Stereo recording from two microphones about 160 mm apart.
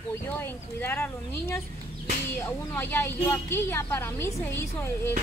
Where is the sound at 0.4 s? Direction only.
10° left (ahead or behind).